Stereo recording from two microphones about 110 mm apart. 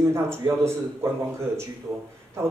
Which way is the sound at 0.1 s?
25° right (ahead or behind).